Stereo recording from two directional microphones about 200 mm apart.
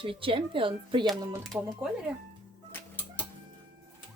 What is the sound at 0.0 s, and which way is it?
Speech, 25° right (ahead or behind).